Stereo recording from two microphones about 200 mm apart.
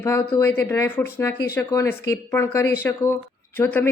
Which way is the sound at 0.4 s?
10° left (ahead or behind).